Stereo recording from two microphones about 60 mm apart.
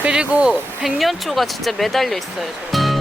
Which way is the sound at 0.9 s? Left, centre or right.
Centre.